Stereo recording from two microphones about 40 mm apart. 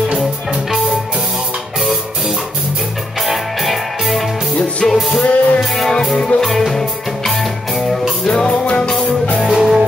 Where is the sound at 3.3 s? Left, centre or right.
Centre.